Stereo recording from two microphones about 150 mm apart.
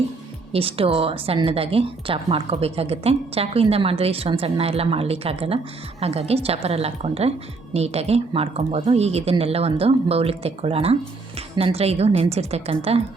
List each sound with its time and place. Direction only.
0.5 s a woman's voice: 40° right (ahead or behind)